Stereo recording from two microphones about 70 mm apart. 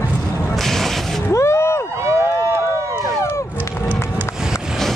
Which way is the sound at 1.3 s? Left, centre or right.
Left.